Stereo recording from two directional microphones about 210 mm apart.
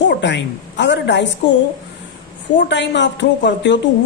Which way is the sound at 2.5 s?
60° left (ahead or behind).